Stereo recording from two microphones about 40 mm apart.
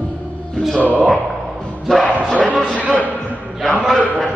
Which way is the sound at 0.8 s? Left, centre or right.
Right.